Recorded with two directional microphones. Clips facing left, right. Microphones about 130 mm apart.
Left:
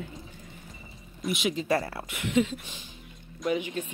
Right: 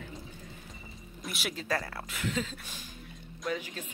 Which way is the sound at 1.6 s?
25° left (ahead or behind).